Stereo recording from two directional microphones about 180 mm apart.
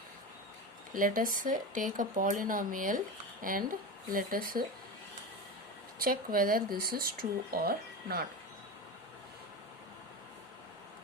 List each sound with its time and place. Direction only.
0.9 s speech: 50° right (ahead or behind)
6.0 s speech: 50° right (ahead or behind)